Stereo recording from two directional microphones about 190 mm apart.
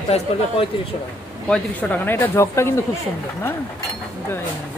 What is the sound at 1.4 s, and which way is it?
Speech, 5° left (ahead or behind).